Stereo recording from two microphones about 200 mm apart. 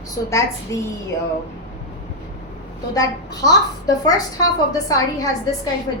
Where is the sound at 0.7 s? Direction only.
15° left (ahead or behind).